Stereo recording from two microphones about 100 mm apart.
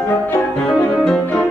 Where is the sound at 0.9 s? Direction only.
10° left (ahead or behind).